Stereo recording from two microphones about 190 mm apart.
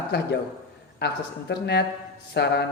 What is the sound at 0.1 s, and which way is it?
Speech, 60° left (ahead or behind).